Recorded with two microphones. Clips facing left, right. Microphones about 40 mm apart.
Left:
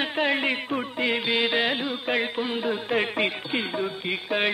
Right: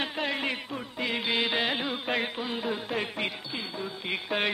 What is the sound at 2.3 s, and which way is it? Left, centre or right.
Music, centre.